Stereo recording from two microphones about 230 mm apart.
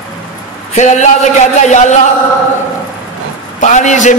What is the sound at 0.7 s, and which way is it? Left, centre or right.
Speech, left.